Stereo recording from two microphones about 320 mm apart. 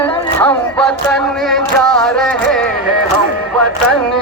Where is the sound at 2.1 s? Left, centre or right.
Centre.